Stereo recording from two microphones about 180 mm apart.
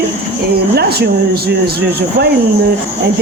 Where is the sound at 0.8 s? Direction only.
65° right (ahead or behind).